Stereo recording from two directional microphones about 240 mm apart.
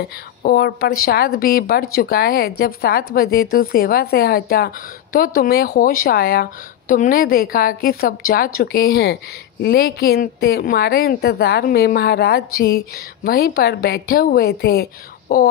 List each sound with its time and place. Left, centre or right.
0.4 s a woman's voice: left